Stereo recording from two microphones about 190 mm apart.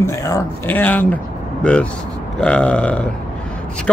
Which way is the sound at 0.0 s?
15° left (ahead or behind).